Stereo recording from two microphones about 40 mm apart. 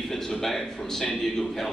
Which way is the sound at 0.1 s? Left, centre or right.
Centre.